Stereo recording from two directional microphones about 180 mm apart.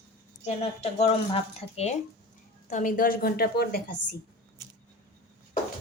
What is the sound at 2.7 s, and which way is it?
A woman's voice, 45° left (ahead or behind).